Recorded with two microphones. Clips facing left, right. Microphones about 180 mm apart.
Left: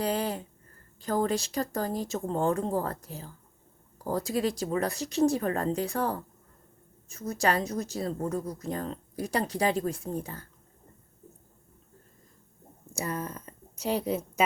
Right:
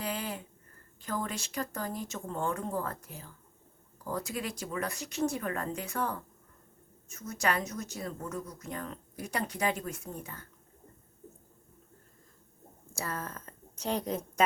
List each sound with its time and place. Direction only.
0.0 s a woman's voice: 40° left (ahead or behind)
12.9 s a woman's voice: 15° left (ahead or behind)